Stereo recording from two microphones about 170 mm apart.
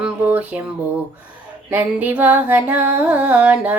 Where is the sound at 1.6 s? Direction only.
10° right (ahead or behind).